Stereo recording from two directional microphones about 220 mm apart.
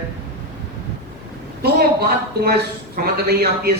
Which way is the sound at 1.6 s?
45° right (ahead or behind).